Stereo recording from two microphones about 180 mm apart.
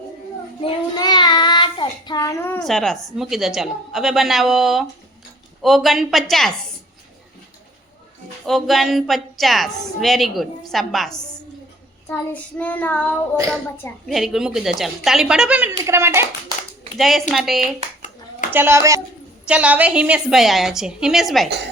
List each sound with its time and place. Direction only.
0.6 s child singing: 20° left (ahead or behind)
2.6 s a woman's voice: centre (ahead or behind)
8.4 s a woman's voice: centre (ahead or behind)
12.0 s child singing: 10° left (ahead or behind)
13.5 s a woman's voice: centre (ahead or behind); by 16.2 s 15° right (ahead or behind)
17.0 s a woman's voice: centre (ahead or behind)
18.5 s a woman's voice: 15° right (ahead or behind)